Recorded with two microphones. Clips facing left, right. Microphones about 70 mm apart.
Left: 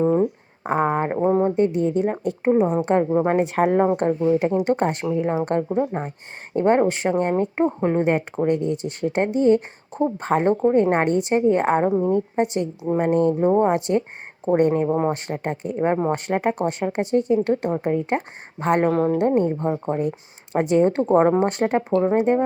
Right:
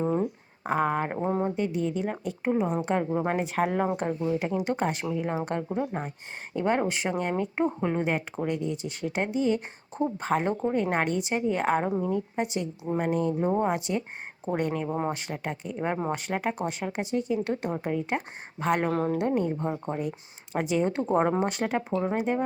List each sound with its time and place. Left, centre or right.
0.1 s a sound: left
1.1 s speech: left
1.5 s speech: left
6.5 s speech: left
13.4 s speech: left
19.6 s speech: left
21.2 s speech: left
21.4 s speech: left